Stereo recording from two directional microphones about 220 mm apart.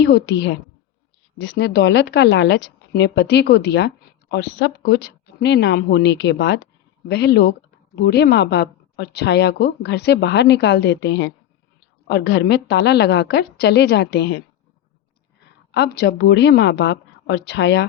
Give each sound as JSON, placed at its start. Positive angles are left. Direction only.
{"t": 0.0, "sound": "a woman's voice", "side_deg": 50}
{"t": 15.7, "sound": "a woman's voice", "side_deg": 50}